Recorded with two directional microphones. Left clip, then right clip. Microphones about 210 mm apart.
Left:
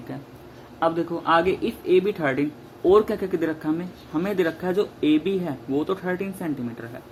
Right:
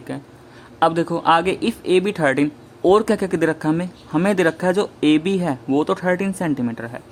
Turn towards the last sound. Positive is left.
turn(degrees=-45)  # may be behind; listen again after turning